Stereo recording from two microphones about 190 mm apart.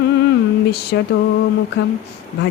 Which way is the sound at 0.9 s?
55° left (ahead or behind).